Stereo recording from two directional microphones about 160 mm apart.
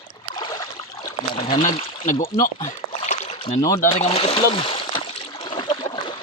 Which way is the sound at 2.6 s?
50° left (ahead or behind).